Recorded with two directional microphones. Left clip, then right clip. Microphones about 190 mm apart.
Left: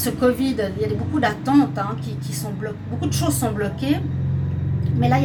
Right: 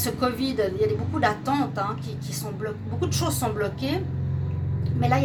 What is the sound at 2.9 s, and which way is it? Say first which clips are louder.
Speech: left 4 dB; 50° right (ahead or behind).